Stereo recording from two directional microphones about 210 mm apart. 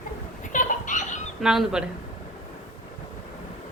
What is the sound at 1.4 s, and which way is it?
Speech, centre (ahead or behind).